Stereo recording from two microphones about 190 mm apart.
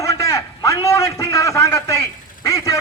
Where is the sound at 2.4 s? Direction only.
15° left (ahead or behind).